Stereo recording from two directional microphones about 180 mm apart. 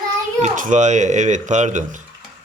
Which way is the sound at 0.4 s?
45° right (ahead or behind).